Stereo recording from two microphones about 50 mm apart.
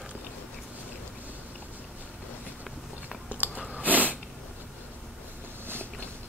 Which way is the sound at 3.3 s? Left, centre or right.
Right.